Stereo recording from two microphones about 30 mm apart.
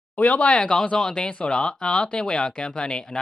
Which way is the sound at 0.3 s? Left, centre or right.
Left.